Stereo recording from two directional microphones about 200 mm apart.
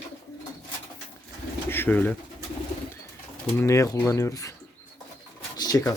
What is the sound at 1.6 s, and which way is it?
Pigeon, 10° left (ahead or behind).